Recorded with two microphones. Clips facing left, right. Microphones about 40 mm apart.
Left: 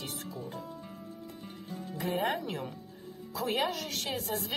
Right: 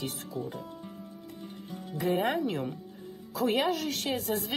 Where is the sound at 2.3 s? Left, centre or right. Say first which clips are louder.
Right 5 dB; centre.